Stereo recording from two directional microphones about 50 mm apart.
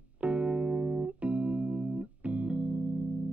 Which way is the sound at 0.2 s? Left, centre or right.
Right.